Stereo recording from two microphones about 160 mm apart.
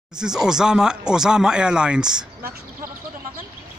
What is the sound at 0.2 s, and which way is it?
Speech, 5° right (ahead or behind).